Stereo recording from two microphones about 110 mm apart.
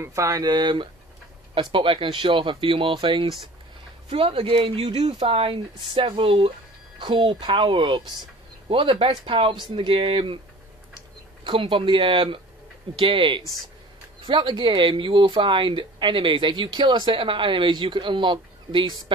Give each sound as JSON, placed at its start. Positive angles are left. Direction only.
{"t": 0.0, "sound": "speech", "side_deg": -25}
{"t": 1.5, "sound": "speech", "side_deg": -50}
{"t": 11.4, "sound": "speech", "side_deg": -50}